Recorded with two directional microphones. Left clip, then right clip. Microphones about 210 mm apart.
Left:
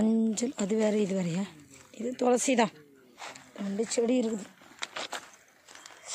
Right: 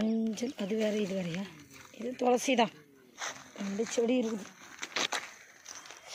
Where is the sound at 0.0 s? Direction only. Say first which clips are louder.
Left 5 dB; 30° left (ahead or behind).